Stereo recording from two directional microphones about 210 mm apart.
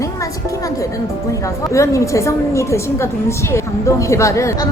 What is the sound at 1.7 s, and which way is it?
A woman's voice, 15° left (ahead or behind).